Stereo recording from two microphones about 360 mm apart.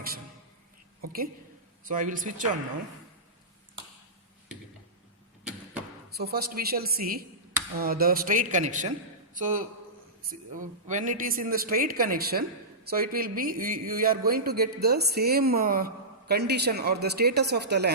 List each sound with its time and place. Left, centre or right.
1.0 s a man's voice: right
6.1 s a man's voice: right